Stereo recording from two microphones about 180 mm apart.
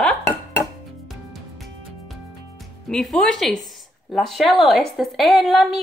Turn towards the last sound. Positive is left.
turn(degrees=0)  # may be behind; listen again after turning